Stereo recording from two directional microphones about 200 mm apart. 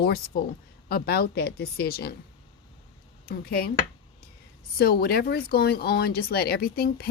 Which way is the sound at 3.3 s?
50° left (ahead or behind).